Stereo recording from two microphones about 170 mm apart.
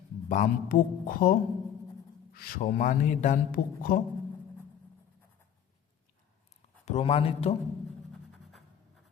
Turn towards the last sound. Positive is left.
turn(degrees=35)  # may be behind; listen again after turning